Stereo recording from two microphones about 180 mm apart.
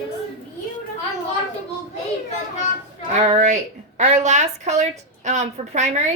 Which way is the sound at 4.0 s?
40° right (ahead or behind).